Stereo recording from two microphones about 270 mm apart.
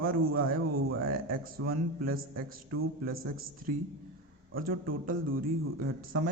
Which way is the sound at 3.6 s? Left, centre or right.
Right.